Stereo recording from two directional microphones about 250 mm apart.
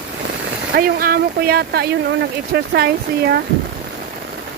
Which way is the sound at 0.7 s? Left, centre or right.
Right.